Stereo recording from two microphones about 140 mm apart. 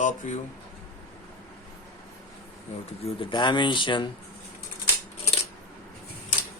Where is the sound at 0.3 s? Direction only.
65° left (ahead or behind).